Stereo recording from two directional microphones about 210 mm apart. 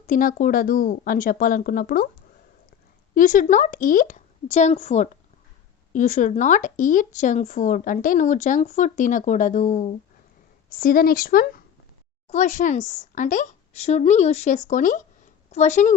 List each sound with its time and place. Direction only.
0.1 s speech: 40° left (ahead or behind)
3.2 s speech: 40° left (ahead or behind)